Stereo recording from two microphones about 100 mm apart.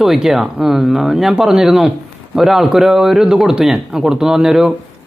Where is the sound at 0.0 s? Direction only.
5° right (ahead or behind).